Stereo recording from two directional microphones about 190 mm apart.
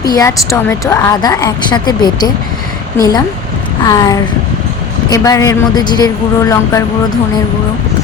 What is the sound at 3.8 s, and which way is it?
A woman's voice, 20° left (ahead or behind).